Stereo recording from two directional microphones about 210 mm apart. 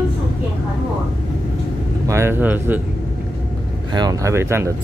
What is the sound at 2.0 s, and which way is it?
Speech, 10° right (ahead or behind).